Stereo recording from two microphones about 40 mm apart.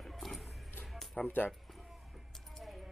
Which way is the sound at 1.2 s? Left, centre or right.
Left.